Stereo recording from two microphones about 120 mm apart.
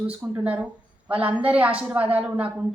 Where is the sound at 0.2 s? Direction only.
15° right (ahead or behind).